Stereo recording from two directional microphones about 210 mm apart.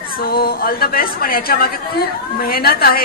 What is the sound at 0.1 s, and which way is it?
A woman's voice, 45° left (ahead or behind).